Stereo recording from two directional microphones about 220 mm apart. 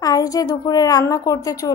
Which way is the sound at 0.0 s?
15° left (ahead or behind).